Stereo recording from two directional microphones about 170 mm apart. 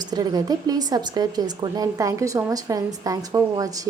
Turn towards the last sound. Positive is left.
turn(degrees=-20)  # may be behind; listen again after turning